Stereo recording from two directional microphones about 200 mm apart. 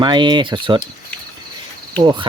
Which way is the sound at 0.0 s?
20° right (ahead or behind).